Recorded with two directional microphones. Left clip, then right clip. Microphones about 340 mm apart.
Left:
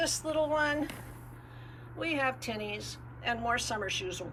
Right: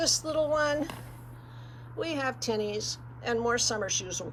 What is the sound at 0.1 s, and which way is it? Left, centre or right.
Speech, centre.